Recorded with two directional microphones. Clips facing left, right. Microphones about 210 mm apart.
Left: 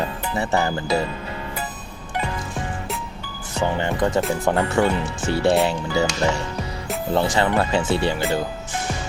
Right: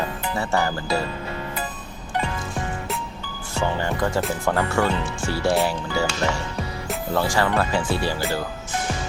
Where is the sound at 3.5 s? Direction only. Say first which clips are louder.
Left 2 dB; 20° left (ahead or behind).